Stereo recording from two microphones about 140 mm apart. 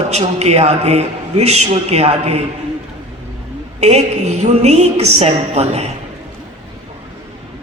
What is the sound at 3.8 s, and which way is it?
A man's voice, 50° right (ahead or behind).